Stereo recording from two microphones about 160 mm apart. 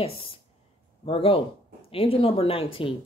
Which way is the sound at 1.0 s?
35° left (ahead or behind).